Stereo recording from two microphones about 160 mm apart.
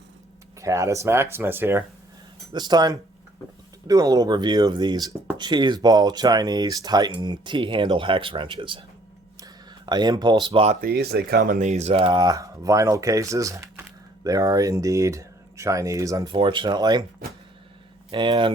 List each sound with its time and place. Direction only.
0.6 s speech: 20° right (ahead or behind)
2.5 s speech: 25° right (ahead or behind)
10.8 s speech: 80° right; by 17.0 s 25° right (ahead or behind)
18.1 s speech: 30° right (ahead or behind)